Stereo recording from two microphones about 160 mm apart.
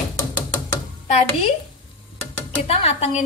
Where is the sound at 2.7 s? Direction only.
40° left (ahead or behind).